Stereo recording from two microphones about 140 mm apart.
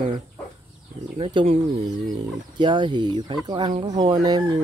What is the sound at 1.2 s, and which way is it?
Speech, 40° right (ahead or behind).